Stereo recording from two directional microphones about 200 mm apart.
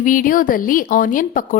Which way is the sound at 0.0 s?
40° left (ahead or behind).